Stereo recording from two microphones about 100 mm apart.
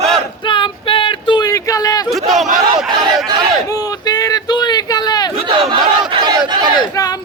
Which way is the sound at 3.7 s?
40° left (ahead or behind).